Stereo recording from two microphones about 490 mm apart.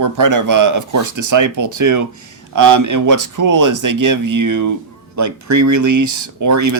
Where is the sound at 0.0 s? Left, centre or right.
Right.